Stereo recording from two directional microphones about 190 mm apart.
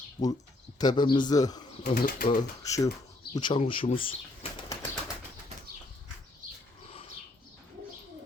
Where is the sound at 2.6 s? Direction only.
15° left (ahead or behind).